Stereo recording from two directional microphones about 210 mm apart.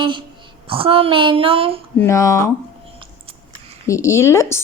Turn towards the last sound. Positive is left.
turn(degrees=15)  # may be behind; listen again after turning